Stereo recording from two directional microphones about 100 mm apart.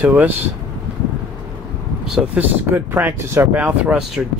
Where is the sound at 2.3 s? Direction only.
20° right (ahead or behind).